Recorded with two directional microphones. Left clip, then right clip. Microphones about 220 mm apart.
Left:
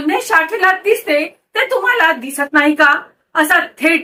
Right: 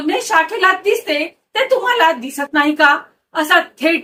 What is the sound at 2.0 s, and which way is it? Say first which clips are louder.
A woman's voice: left 1 dB; 5° left (ahead or behind).